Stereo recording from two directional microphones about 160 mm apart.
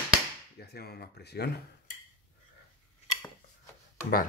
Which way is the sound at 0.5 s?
80° left.